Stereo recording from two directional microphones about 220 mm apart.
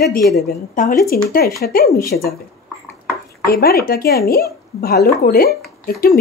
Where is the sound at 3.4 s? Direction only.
45° left (ahead or behind).